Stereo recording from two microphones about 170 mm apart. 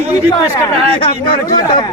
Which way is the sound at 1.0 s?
30° left (ahead or behind).